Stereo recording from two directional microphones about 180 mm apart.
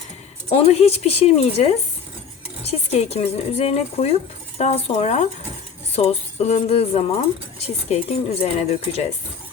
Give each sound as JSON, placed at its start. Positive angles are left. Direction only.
{"t": 0.5, "sound": "speech", "side_deg": 35}